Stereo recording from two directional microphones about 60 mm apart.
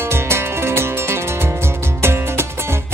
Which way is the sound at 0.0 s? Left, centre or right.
Right.